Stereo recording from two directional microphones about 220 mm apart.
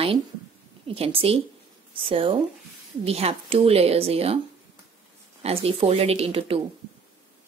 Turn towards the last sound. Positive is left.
turn(degrees=-25)  # may be behind; listen again after turning